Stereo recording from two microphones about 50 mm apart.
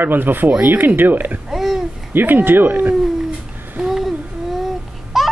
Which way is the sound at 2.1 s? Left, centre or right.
Right.